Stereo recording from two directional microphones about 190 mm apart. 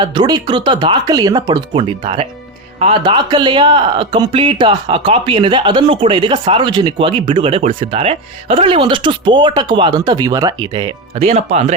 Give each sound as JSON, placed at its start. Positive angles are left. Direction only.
{"t": 0.0, "sound": "speech", "side_deg": -25}